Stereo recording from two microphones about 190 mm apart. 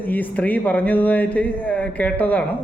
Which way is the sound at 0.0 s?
10° left (ahead or behind).